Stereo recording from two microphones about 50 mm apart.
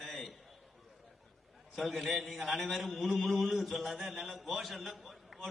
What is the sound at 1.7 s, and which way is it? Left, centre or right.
A man's voice, centre.